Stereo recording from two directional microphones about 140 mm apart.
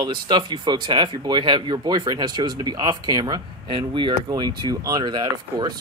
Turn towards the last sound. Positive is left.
turn(degrees=-30)  # may be behind; listen again after turning